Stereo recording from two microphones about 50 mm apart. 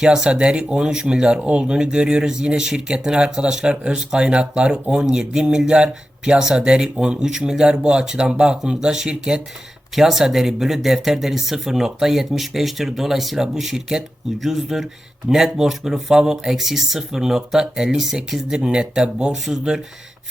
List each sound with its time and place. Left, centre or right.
0.0 s speech: centre
9.9 s speech: centre